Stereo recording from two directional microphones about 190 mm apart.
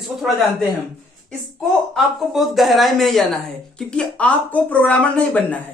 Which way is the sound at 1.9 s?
Centre (ahead or behind).